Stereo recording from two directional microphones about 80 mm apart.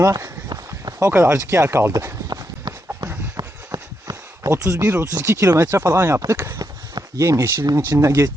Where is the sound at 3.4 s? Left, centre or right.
Right.